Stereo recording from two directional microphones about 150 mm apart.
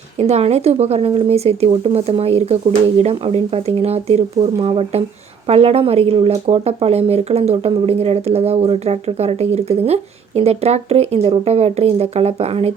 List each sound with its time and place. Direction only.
0.2 s speech: 45° right (ahead or behind)